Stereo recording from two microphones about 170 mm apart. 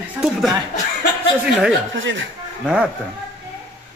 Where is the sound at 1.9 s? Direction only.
90° right.